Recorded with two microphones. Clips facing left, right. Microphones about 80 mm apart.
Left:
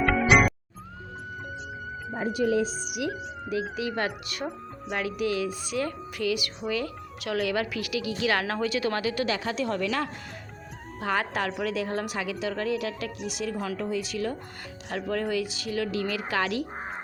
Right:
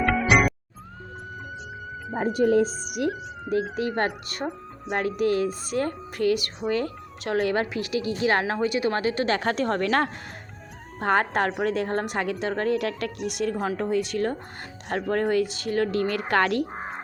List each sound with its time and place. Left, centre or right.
0.0 s music: centre
2.1 s a woman's voice: right